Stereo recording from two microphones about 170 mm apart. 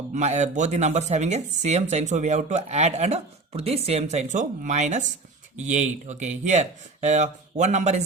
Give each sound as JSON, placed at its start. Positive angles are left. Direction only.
{"t": 0.1, "sound": "speech", "side_deg": -45}